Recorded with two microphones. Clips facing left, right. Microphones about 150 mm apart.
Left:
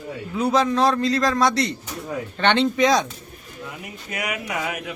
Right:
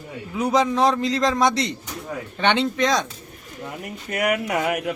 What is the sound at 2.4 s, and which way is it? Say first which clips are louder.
Speech: left 1 dB; 10° right (ahead or behind).